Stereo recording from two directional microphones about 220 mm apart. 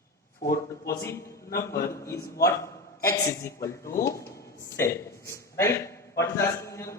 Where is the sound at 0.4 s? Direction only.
15° left (ahead or behind).